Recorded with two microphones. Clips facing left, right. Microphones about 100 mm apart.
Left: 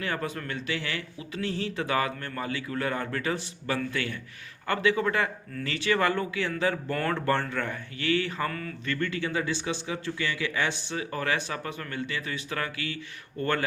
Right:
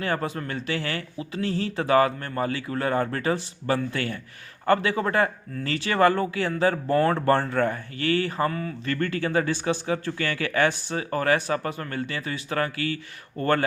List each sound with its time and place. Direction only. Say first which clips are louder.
0.0 s speech: right 4 dB; 35° right (ahead or behind)